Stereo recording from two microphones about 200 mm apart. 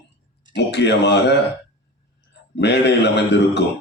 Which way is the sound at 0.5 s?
60° left (ahead or behind).